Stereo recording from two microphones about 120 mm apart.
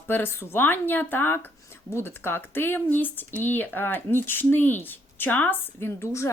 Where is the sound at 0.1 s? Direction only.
20° left (ahead or behind).